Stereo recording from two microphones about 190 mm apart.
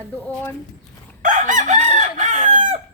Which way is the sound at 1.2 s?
45° right (ahead or behind).